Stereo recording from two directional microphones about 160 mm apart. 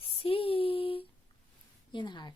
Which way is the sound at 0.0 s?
35° left (ahead or behind).